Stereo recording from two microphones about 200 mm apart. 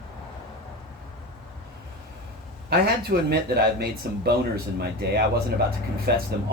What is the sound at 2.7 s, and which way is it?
Speech, 50° right (ahead or behind).